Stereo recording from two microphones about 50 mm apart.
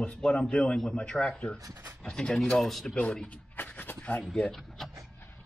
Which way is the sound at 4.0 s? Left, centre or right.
Left.